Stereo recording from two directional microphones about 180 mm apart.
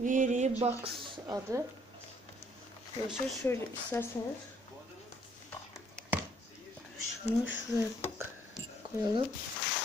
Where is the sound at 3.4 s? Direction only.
15° left (ahead or behind).